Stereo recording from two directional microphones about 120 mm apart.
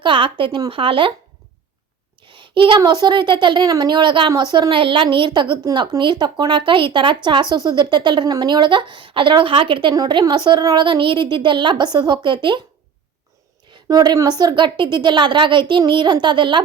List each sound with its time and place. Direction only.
0.0 s speech: 45° right (ahead or behind)
2.2 s a child's voice: 45° right (ahead or behind)
13.8 s a woman's voice: 35° right (ahead or behind)